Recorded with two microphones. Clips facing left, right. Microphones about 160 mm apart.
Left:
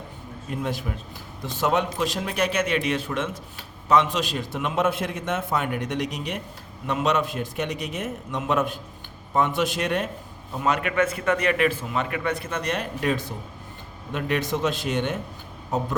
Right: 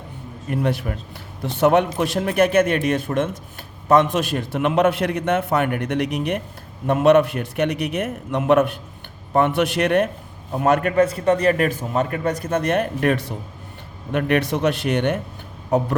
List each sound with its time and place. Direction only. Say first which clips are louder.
0.4 s a man's voice: right 6 dB; 65° right (ahead or behind)
10.6 s a man's voice: right 6 dB; 50° right (ahead or behind)